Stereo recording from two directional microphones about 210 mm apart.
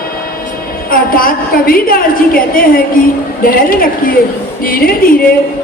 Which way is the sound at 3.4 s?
45° left (ahead or behind).